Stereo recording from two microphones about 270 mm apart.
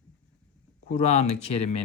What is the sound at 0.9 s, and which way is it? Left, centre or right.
Speech, left.